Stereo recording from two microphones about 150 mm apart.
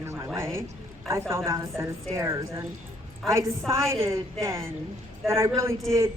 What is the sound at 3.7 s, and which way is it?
Speech, 20° right (ahead or behind).